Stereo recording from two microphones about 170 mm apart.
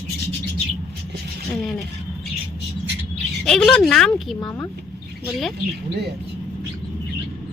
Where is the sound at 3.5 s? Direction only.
5° left (ahead or behind).